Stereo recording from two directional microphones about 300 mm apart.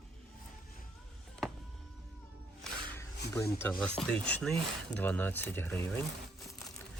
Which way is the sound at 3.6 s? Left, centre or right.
Centre.